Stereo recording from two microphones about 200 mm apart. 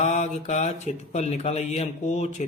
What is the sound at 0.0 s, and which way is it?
Speech, 35° left (ahead or behind).